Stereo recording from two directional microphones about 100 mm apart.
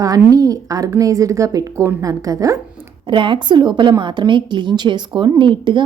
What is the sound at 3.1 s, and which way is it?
A woman's voice, 55° right (ahead or behind).